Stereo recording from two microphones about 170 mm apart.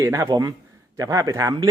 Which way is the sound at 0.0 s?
20° right (ahead or behind).